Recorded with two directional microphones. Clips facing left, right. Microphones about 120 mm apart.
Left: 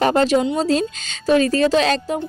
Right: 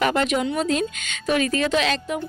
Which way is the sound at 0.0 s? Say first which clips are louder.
Left 5 dB; 35° left (ahead or behind).